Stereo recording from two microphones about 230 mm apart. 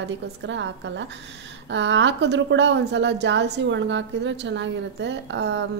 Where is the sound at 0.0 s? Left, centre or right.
Right.